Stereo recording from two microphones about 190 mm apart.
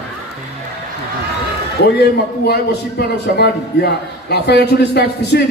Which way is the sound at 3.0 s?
60° left (ahead or behind).